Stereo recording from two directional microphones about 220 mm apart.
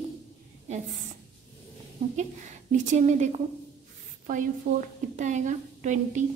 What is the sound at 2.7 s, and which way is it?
A woman's voice, 30° right (ahead or behind).